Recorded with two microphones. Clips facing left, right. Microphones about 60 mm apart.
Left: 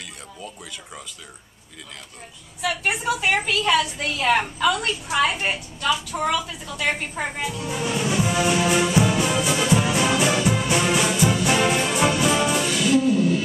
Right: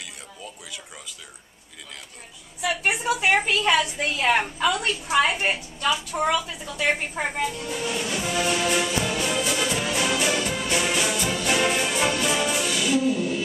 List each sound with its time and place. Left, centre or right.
3.0 s a woman's voice: right; by 5.6 s centre
5.8 s a woman's voice: centre
7.4 s music: centre